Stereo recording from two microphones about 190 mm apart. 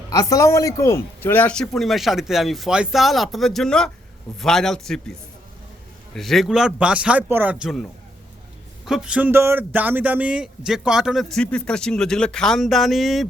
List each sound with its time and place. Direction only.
0.1 s speech: 20° left (ahead or behind); by 5.1 s centre (ahead or behind)
6.1 s speech: centre (ahead or behind)